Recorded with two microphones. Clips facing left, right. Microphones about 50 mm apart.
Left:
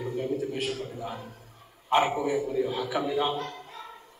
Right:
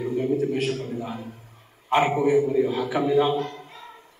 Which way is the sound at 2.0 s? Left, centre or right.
Right.